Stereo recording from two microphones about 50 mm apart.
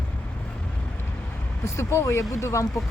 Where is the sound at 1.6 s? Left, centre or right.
Left.